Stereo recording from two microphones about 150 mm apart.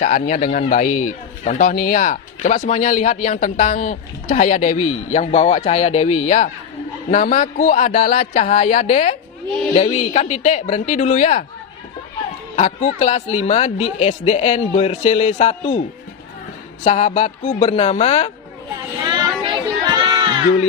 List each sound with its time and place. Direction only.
0.0 s speech: 55° left (ahead or behind)
12.5 s speech: 50° left (ahead or behind)
16.8 s speech: 55° left (ahead or behind)
17.7 s speech: 45° left (ahead or behind)
19.1 s a sound: 30° right (ahead or behind)